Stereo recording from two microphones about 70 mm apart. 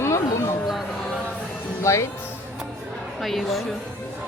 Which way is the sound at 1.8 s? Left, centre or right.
Left.